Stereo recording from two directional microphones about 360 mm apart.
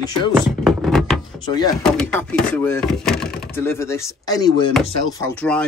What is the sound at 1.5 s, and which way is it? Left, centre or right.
Speech, centre.